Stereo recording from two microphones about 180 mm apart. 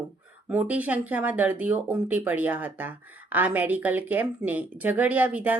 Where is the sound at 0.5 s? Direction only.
10° right (ahead or behind).